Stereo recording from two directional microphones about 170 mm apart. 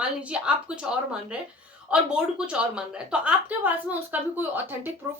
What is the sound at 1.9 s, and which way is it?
A woman's voice, 5° right (ahead or behind).